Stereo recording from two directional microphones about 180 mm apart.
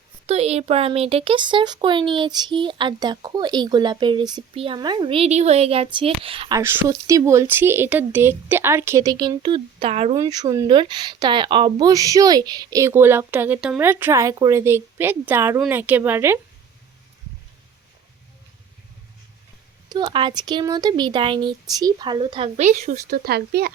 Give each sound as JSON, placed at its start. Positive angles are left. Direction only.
{"t": 0.3, "sound": "speech", "side_deg": -35}
{"t": 6.6, "sound": "speech", "side_deg": -15}
{"t": 10.2, "sound": "speech", "side_deg": -20}
{"t": 19.9, "sound": "speech", "side_deg": -25}